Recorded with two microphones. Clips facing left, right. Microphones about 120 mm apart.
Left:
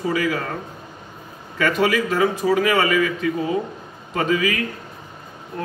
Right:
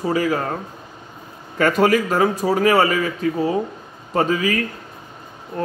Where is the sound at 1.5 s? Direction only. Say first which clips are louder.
Right 3 dB; 40° right (ahead or behind).